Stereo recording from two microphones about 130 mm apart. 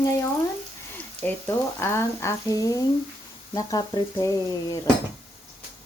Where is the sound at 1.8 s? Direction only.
20° left (ahead or behind).